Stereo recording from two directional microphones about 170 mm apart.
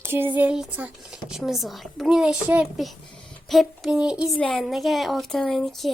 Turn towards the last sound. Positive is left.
turn(degrees=0)  # may be behind; listen again after turning